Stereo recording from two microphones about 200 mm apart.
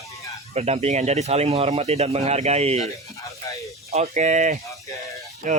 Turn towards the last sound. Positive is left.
turn(degrees=-40)  # may be behind; listen again after turning